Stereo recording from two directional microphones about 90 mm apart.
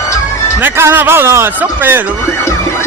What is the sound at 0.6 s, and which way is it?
Speech, 25° right (ahead or behind).